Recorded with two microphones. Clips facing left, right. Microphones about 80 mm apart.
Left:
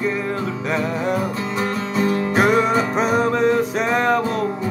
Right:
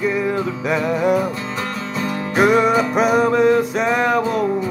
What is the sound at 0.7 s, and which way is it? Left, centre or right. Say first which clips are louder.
Music: right 4 dB; centre.